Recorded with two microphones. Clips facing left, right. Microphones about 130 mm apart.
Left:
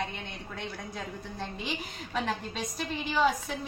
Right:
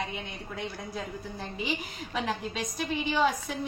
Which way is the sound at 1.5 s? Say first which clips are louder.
Right 3 dB; 5° right (ahead or behind).